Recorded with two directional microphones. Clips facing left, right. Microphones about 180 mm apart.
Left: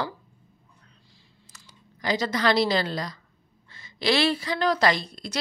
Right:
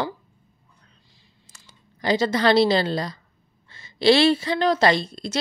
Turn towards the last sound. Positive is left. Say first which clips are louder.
# right 4 dB
turn(degrees=-25)  # may be behind; listen again after turning